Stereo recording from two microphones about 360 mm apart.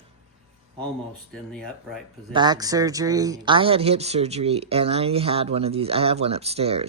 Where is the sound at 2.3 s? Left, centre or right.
Centre.